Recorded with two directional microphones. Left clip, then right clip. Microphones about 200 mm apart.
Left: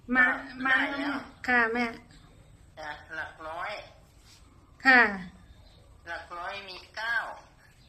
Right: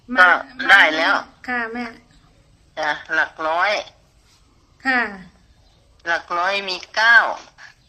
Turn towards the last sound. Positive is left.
turn(degrees=-60)  # may be behind; listen again after turning